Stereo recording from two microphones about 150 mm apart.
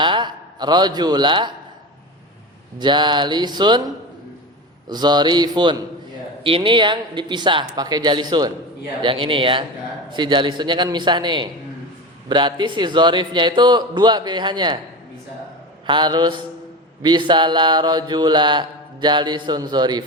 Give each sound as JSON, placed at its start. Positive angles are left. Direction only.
{"t": 0.0, "sound": "a man's voice", "side_deg": -30}
{"t": 2.7, "sound": "speech", "side_deg": -30}
{"t": 4.9, "sound": "mantra", "side_deg": -30}
{"t": 6.4, "sound": "speech", "side_deg": -35}
{"t": 12.3, "sound": "mantra", "side_deg": -30}
{"t": 15.9, "sound": "speech", "side_deg": -30}
{"t": 17.0, "sound": "mantra", "side_deg": -30}